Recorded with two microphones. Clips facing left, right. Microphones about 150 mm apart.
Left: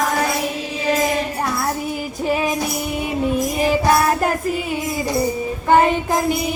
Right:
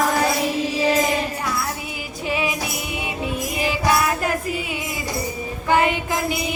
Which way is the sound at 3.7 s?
45° left (ahead or behind).